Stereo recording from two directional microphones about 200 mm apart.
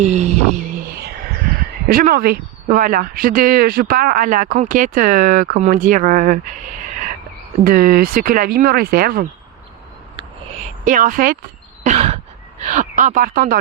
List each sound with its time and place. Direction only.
0.0 s a sound: 35° right (ahead or behind)
1.9 s speech: 45° right (ahead or behind)
7.6 s speech: 45° right (ahead or behind)
10.8 s speech: 40° right (ahead or behind)
11.8 s throat clearing: 35° right (ahead or behind)
12.6 s speech: 40° right (ahead or behind)